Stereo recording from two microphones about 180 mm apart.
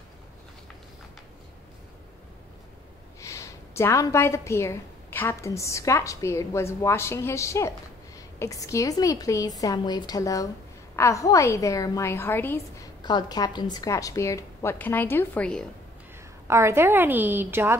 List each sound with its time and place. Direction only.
3.2 s a woman's voice: 15° left (ahead or behind)
13.0 s a woman's voice: 20° left (ahead or behind); by 15.6 s 5° left (ahead or behind)
16.4 s a woman's voice: 15° right (ahead or behind)